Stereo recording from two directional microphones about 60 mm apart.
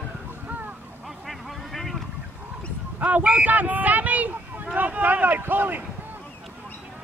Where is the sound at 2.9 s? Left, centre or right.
Right.